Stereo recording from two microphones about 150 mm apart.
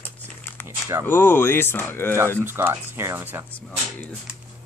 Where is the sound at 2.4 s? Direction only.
15° right (ahead or behind).